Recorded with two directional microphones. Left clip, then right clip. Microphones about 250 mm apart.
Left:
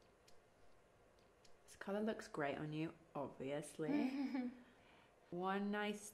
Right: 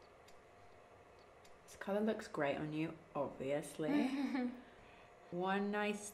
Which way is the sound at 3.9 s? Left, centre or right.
Left.